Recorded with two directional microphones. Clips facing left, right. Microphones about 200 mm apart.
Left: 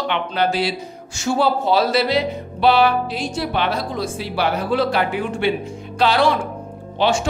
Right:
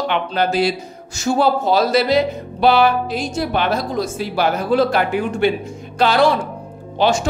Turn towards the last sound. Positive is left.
turn(degrees=-40)  # may be behind; listen again after turning